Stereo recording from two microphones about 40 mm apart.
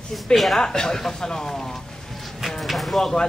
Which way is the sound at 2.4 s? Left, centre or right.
Centre.